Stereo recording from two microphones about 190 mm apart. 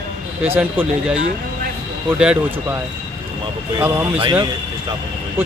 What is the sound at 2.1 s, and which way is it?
Speech, 5° right (ahead or behind).